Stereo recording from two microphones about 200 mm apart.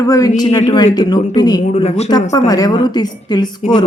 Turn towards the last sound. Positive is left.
turn(degrees=20)  # may be behind; listen again after turning